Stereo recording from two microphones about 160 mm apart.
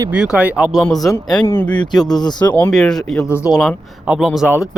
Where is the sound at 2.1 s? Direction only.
25° left (ahead or behind).